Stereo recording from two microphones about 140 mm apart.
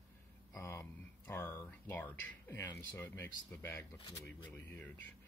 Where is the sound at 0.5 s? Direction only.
20° left (ahead or behind).